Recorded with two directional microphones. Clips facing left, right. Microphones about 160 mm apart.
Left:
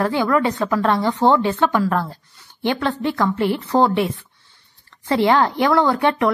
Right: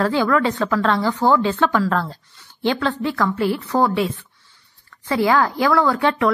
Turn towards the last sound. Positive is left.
turn(degrees=20)  # may be behind; listen again after turning